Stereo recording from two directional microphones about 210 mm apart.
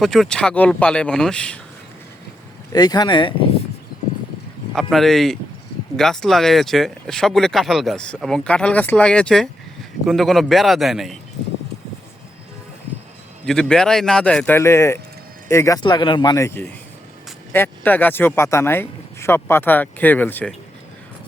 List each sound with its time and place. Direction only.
0.0 s speech: centre (ahead or behind)
2.7 s speech: 20° left (ahead or behind)
4.7 s speech: centre (ahead or behind)
13.4 s speech: 5° left (ahead or behind)